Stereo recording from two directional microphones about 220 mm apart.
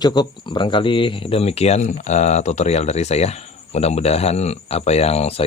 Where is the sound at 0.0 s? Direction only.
20° left (ahead or behind).